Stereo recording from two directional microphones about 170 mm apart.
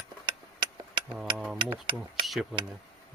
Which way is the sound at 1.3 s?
5° right (ahead or behind).